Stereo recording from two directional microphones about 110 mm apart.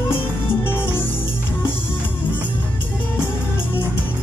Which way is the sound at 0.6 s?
20° left (ahead or behind).